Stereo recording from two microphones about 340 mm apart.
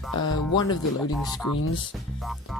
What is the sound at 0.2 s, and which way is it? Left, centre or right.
Speech, centre.